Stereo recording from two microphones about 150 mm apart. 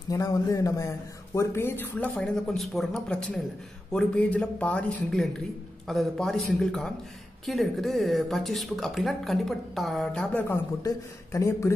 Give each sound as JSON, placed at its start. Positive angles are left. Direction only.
{"t": 0.1, "sound": "a man's voice", "side_deg": 20}
{"t": 11.3, "sound": "speech", "side_deg": 20}